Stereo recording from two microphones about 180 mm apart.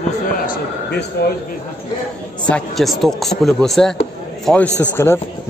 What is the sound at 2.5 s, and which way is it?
A man's voice, centre (ahead or behind).